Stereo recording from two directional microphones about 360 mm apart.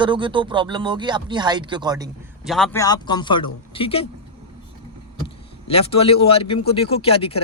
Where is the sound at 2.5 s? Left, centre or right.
Centre.